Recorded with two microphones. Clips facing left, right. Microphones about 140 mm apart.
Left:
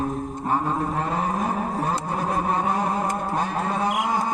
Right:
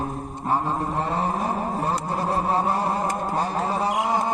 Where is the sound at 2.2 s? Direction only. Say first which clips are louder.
Right 1 dB; 30° right (ahead or behind).